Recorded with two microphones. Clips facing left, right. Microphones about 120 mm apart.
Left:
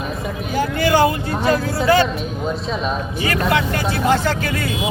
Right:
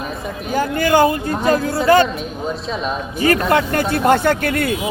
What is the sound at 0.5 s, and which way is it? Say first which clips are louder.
Speech: right 2 dB; 45° right (ahead or behind).